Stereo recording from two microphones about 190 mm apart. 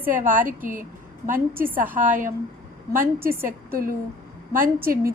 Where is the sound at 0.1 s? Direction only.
45° right (ahead or behind).